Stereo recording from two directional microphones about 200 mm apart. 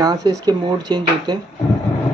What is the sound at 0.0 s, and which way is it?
Speech, 20° right (ahead or behind).